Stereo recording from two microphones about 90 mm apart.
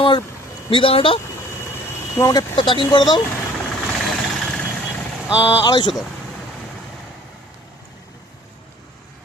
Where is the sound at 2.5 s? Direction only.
65° left (ahead or behind).